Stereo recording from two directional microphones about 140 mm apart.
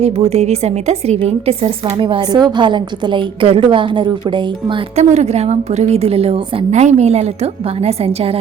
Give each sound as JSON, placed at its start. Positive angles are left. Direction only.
{"t": 0.0, "sound": "a woman's voice", "side_deg": -45}
{"t": 4.9, "sound": "a woman's voice", "side_deg": -50}